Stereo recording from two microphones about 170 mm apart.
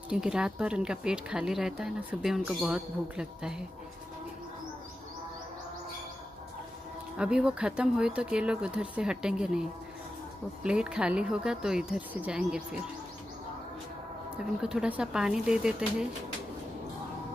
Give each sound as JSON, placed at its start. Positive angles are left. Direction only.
{"t": 0.1, "sound": "speech", "side_deg": -5}
{"t": 7.2, "sound": "speech", "side_deg": -5}
{"t": 14.3, "sound": "speech", "side_deg": -5}